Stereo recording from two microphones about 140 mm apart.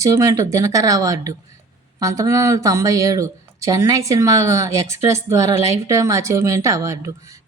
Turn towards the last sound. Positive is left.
turn(degrees=-25)  # may be behind; listen again after turning